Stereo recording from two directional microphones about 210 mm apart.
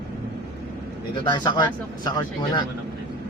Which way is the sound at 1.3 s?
20° left (ahead or behind).